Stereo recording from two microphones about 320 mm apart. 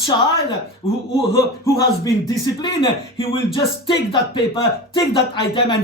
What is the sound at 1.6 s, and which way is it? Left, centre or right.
Speech, centre.